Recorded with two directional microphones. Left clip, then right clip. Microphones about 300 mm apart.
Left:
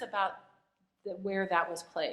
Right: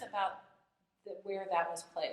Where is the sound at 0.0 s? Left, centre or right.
Left.